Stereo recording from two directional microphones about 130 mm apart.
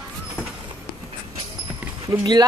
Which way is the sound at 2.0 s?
30° right (ahead or behind).